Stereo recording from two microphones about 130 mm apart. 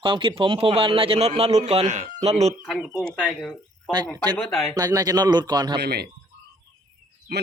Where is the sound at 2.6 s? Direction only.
5° right (ahead or behind).